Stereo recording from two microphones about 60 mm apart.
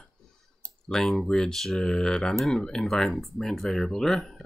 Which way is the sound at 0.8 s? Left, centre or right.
Centre.